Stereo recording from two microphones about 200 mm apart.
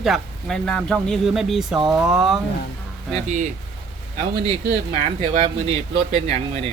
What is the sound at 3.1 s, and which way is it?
Speech, 35° right (ahead or behind).